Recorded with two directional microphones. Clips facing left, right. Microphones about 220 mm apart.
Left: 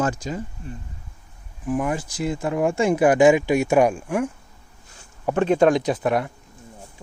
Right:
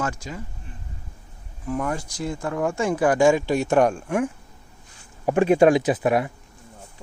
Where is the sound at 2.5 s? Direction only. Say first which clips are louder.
Left 3 dB; 20° left (ahead or behind).